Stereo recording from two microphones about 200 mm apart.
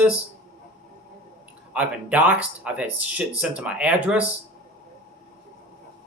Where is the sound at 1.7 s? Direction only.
5° right (ahead or behind).